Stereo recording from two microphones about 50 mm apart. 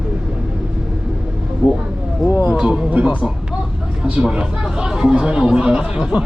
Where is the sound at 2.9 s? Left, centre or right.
Right.